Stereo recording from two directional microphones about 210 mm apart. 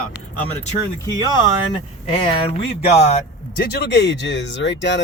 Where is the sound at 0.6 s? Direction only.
15° left (ahead or behind).